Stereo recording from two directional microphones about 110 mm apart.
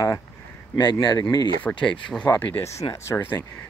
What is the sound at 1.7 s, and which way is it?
Speech, 10° left (ahead or behind).